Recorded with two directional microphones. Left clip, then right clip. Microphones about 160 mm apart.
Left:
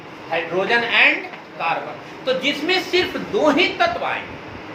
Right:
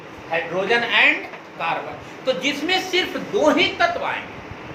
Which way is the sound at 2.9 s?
5° right (ahead or behind).